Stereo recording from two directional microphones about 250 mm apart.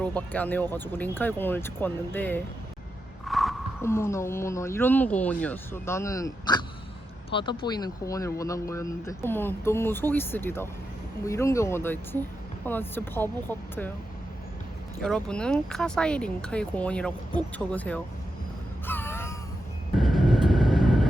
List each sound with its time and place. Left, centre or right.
0.0 s speech: centre
3.2 s a sound: centre
3.8 s speech: centre
15.0 s speech: centre
18.9 s a sound: centre
20.0 s vehicle: centre